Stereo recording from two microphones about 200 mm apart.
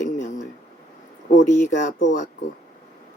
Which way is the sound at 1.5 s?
40° left (ahead or behind).